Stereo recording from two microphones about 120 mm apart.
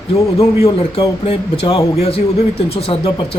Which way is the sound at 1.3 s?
50° left (ahead or behind).